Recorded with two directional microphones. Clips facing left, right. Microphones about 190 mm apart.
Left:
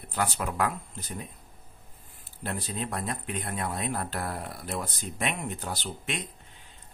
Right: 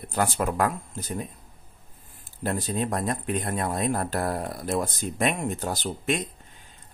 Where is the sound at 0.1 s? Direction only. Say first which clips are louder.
Right 5 dB; 45° right (ahead or behind).